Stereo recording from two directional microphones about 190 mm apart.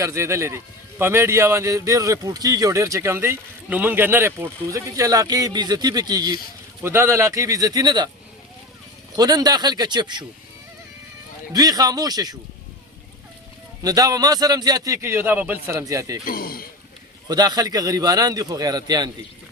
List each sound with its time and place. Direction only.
0.0 s a man's voice: 15° right (ahead or behind)
9.1 s a man's voice: 20° right (ahead or behind)
11.5 s a man's voice: 20° right (ahead or behind)
13.8 s a man's voice: 20° right (ahead or behind)
16.2 s speech: 50° left (ahead or behind)
17.2 s a man's voice: 20° right (ahead or behind)